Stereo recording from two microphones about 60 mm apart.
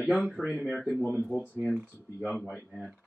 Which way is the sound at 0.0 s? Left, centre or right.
Centre.